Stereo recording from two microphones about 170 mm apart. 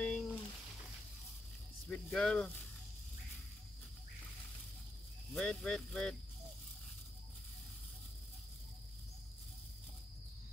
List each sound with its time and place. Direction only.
0.0 s a sound: 5° left (ahead or behind)
1.9 s speech: 5° left (ahead or behind)
5.3 s speech: 5° left (ahead or behind)